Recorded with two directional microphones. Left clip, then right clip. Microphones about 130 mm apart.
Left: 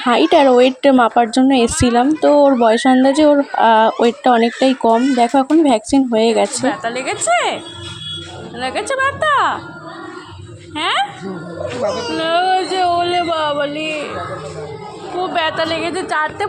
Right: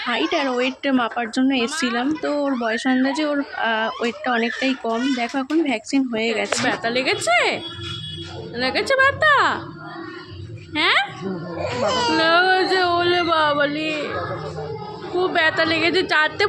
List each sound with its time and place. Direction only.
0.1 s a woman's voice: 60° left (ahead or behind)
6.7 s speech: 35° right (ahead or behind)
10.8 s a woman's voice: 30° right (ahead or behind)
15.2 s a woman's voice: 25° right (ahead or behind)